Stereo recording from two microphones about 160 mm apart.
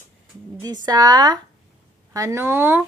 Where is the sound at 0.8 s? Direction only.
25° right (ahead or behind).